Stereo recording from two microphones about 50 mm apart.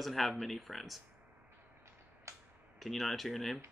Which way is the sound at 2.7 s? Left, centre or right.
Centre.